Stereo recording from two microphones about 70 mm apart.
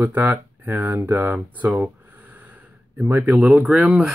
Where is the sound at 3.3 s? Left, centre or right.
Centre.